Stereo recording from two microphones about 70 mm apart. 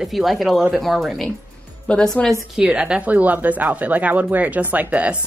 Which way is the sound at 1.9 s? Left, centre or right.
Centre.